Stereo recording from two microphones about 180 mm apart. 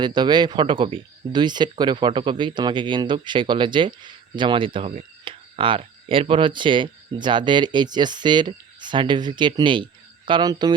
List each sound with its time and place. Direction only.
0.0 s speech: 25° right (ahead or behind)